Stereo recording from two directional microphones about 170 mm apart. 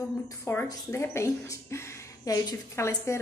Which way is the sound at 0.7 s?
15° left (ahead or behind).